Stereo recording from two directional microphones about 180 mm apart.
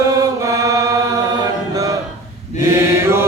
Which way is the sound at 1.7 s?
20° right (ahead or behind).